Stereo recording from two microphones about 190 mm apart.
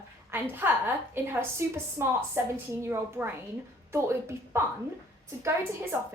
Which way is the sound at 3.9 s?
15° right (ahead or behind).